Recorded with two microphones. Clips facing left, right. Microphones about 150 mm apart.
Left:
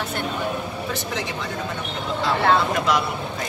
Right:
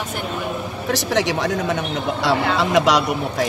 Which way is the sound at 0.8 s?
80° right.